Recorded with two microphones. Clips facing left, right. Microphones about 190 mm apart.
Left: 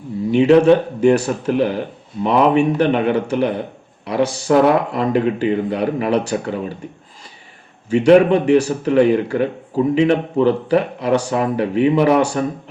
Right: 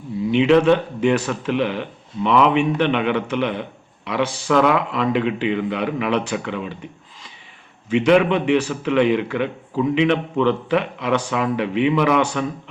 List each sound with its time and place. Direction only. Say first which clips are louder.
0.3 s speech: left 4 dB; 40° left (ahead or behind)
7.9 s speech: left 5 dB; 40° left (ahead or behind)